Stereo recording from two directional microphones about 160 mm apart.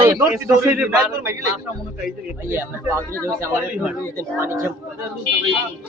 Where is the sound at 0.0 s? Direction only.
20° right (ahead or behind).